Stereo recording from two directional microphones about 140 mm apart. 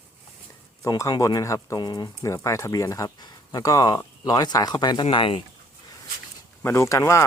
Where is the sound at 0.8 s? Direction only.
25° left (ahead or behind).